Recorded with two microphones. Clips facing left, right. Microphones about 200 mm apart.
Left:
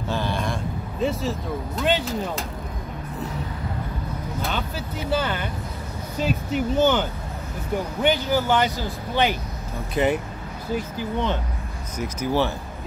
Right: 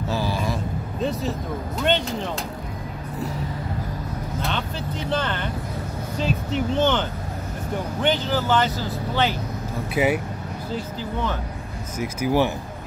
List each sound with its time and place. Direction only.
0.1 s a sound: 5° right (ahead or behind)
1.8 s speech: centre (ahead or behind)
4.4 s speech: 5° left (ahead or behind)
9.9 s speech: 5° right (ahead or behind)
10.7 s speech: 15° left (ahead or behind)
12.0 s speech: 10° right (ahead or behind)